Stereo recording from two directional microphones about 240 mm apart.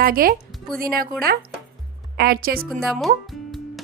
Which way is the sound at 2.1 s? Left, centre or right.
Right.